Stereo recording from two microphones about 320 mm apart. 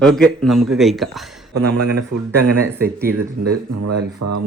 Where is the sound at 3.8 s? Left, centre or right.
Right.